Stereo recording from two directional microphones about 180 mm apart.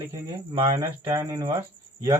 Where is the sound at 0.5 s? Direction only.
30° right (ahead or behind).